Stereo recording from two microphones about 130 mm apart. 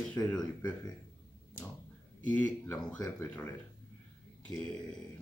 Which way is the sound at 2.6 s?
15° left (ahead or behind).